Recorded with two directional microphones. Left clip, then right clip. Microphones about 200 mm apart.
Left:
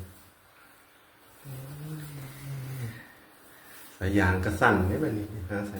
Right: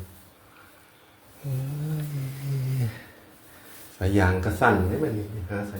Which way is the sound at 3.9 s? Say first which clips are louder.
Right 2 dB; 20° right (ahead or behind).